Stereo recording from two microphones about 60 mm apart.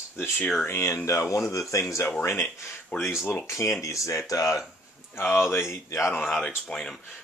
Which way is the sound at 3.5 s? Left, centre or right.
Left.